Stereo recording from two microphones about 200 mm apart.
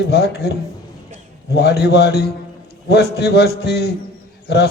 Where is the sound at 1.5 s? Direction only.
55° left (ahead or behind).